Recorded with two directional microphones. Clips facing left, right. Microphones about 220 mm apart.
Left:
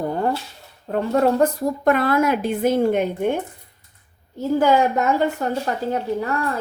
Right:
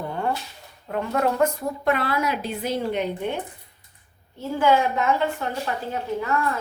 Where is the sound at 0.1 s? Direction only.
35° left (ahead or behind).